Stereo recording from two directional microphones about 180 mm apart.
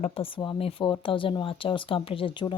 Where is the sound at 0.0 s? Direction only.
30° left (ahead or behind).